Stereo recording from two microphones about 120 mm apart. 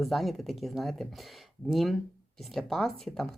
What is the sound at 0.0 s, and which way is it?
Speech, centre (ahead or behind).